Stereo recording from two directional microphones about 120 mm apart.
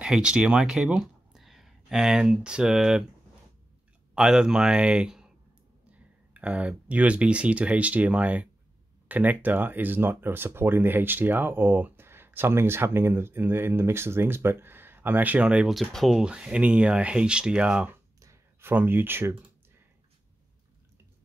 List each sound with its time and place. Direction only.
0.0 s speech: 5° right (ahead or behind)
4.1 s speech: 5° right (ahead or behind)
6.3 s speech: 10° right (ahead or behind)
18.2 s a sound: 20° right (ahead or behind)